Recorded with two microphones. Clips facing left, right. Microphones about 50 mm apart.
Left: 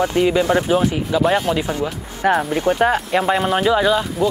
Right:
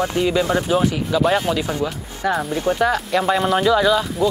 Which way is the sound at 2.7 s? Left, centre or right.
Left.